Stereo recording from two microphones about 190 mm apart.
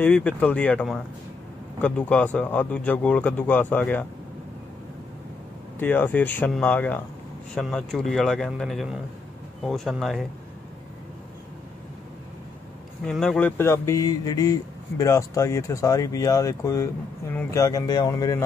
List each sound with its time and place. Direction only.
0.0 s speech: 5° left (ahead or behind)
5.8 s speech: 10° left (ahead or behind)
13.0 s speech: 5° left (ahead or behind)